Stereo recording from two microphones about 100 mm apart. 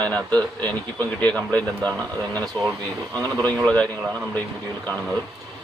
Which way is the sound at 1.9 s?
35° right (ahead or behind).